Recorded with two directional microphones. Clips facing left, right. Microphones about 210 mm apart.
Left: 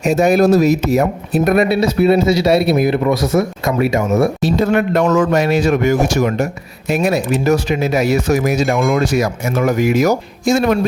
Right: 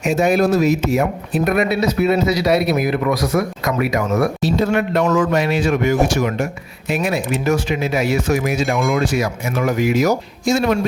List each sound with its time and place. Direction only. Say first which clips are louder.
0.0 s speech: left 3 dB; 40° left (ahead or behind); by 4.3 s 25° left (ahead or behind)
4.4 s a man's voice: left 3 dB; 50° left (ahead or behind)